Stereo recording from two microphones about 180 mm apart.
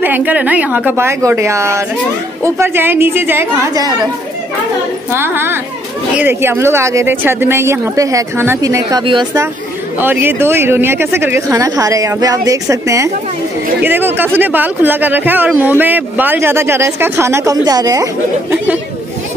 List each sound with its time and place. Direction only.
0.0 s speech: 10° right (ahead or behind)
5.1 s speech: 10° right (ahead or behind)
9.9 s speech: 10° right (ahead or behind)